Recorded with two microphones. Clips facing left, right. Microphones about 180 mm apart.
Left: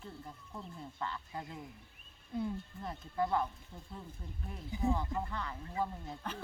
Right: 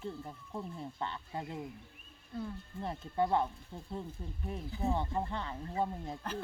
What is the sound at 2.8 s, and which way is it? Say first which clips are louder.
Speech: right 3 dB; 30° right (ahead or behind).